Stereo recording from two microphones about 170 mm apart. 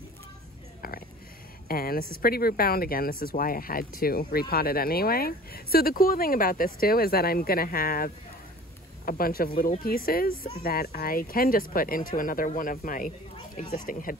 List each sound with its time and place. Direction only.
1.7 s speech: 60° left (ahead or behind)